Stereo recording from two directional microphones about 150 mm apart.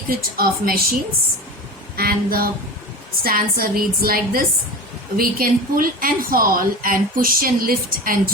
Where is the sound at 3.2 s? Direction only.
75° right (ahead or behind).